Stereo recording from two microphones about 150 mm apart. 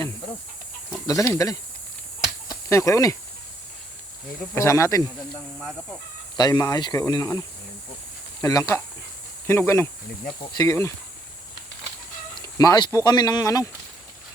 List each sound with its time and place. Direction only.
1.0 s speech: 20° left (ahead or behind)
2.2 s a sound: 20° left (ahead or behind)
4.5 s speech: 20° left (ahead or behind)
6.3 s speech: 25° left (ahead or behind)
12.3 s a sound: 20° left (ahead or behind)
13.1 s speech: 25° left (ahead or behind)